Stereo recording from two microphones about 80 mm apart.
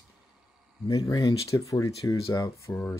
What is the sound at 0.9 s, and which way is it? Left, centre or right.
Speech, left.